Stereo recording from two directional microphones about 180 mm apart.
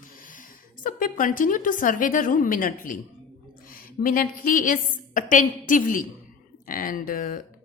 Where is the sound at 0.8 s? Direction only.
50° left (ahead or behind).